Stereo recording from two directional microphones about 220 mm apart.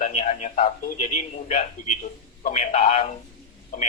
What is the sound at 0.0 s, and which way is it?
Speech, 35° left (ahead or behind).